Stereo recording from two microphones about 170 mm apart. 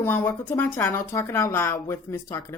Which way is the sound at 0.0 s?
10° left (ahead or behind).